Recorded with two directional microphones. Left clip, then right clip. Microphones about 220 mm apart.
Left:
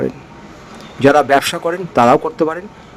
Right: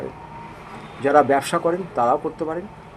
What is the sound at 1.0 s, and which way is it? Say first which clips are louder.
A man's voice: left 6 dB; 55° left (ahead or behind).